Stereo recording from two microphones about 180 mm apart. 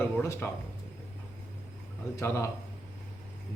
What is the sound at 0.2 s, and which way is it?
Speech, 15° left (ahead or behind).